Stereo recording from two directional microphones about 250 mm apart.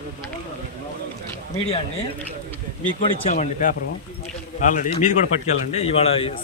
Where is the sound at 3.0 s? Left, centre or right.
Left.